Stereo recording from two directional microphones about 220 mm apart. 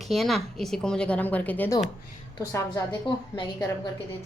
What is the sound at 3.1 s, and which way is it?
Speech, 25° left (ahead or behind).